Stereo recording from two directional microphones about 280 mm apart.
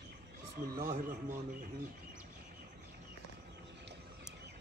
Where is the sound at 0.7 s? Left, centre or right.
Right.